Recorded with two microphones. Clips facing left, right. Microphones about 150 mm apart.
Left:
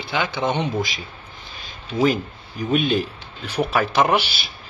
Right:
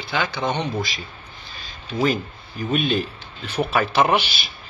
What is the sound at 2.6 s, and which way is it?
Speech, centre (ahead or behind).